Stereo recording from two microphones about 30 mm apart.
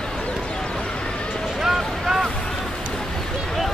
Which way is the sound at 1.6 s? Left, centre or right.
Centre.